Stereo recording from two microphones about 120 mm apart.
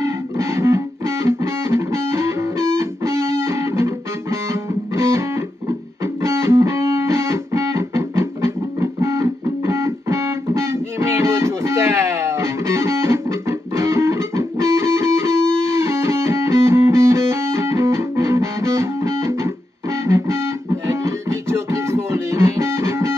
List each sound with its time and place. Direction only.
0.0 s music: 25° right (ahead or behind)
6.2 s music: 20° right (ahead or behind)